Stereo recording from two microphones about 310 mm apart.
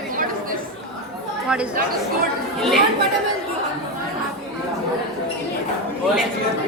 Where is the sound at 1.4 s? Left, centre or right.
Centre.